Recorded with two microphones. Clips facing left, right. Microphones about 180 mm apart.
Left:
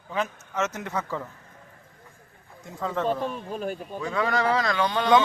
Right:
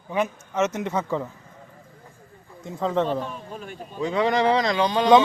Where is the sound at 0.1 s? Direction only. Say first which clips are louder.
Right 4 dB; 15° right (ahead or behind).